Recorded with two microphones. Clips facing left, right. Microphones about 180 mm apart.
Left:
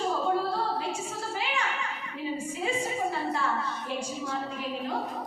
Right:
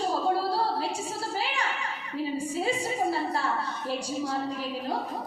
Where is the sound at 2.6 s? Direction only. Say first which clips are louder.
Right 2 dB; 35° right (ahead or behind).